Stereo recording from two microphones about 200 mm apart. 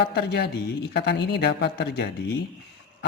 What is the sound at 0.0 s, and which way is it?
A man's voice, 55° left (ahead or behind).